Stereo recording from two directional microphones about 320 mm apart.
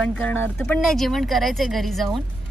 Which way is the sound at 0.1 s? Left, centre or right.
Centre.